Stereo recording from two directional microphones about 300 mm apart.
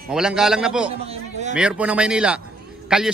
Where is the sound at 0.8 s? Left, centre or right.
Centre.